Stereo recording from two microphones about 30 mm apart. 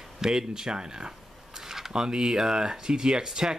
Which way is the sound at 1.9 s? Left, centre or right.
Right.